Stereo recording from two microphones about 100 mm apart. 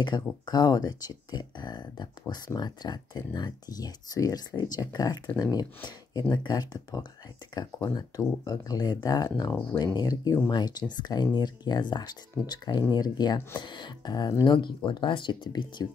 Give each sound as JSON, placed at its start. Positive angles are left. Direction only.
{"t": 0.1, "sound": "speech", "side_deg": 40}